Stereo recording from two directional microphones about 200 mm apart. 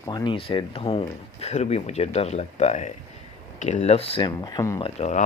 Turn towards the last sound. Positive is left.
turn(degrees=35)  # may be behind; listen again after turning